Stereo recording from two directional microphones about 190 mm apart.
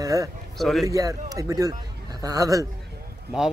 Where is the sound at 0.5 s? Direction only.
Centre (ahead or behind).